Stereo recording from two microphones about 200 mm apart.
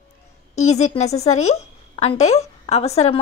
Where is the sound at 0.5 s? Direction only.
35° left (ahead or behind).